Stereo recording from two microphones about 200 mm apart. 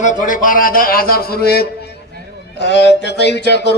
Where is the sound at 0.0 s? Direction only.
40° left (ahead or behind).